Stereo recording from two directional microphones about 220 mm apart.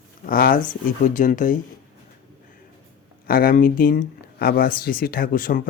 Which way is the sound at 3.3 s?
40° left (ahead or behind).